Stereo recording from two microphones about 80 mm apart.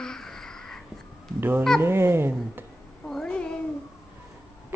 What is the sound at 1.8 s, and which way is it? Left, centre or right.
Speech, right.